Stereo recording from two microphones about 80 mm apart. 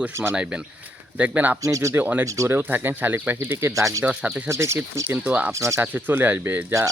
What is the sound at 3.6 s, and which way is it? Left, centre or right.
Speech, right.